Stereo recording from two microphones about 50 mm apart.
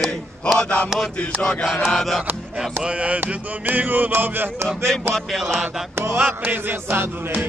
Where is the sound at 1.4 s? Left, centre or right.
Centre.